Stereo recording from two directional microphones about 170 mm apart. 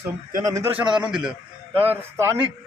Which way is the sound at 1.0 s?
5° right (ahead or behind).